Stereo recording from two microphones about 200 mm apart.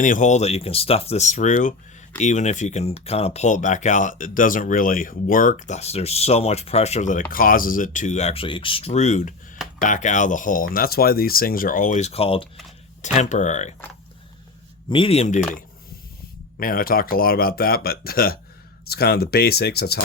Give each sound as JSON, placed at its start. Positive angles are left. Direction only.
{"t": 0.0, "sound": "speech", "side_deg": 40}
{"t": 14.8, "sound": "speech", "side_deg": 25}
{"t": 16.6, "sound": "speech", "side_deg": 45}